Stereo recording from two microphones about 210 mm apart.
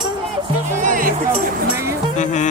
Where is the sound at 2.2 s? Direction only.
35° left (ahead or behind).